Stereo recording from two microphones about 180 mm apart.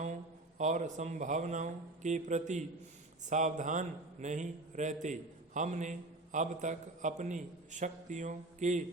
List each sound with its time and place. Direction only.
0.6 s a man's voice: 40° right (ahead or behind)